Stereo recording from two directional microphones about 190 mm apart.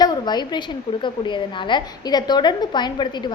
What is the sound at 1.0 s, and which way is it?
A woman's voice, 25° left (ahead or behind).